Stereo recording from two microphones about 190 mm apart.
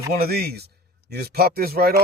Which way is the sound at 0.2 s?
55° right (ahead or behind).